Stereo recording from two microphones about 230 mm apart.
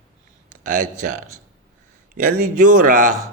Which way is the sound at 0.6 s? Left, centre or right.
Right.